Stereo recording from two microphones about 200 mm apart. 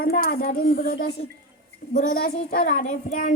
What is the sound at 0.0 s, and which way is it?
Speech, 45° left (ahead or behind).